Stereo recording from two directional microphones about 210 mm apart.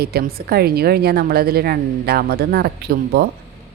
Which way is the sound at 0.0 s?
45° right (ahead or behind).